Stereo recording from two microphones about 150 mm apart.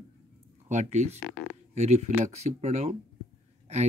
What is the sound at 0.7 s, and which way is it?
Speech, 50° right (ahead or behind).